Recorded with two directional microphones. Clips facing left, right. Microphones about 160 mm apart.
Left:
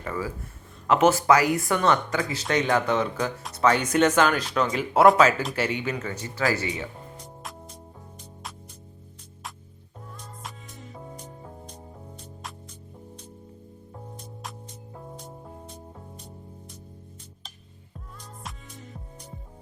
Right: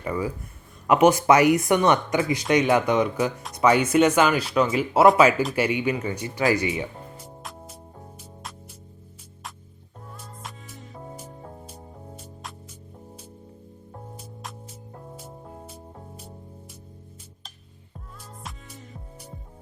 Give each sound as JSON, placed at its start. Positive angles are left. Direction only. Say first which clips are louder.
{"t": 0.0, "sound": "speech", "louder": "right 3 dB", "side_deg": -15}
{"t": 10.2, "sound": "music", "louder": "even", "side_deg": -5}
{"t": 15.1, "sound": "music", "louder": "even", "side_deg": -5}
{"t": 18.4, "sound": "music", "louder": "even", "side_deg": 0}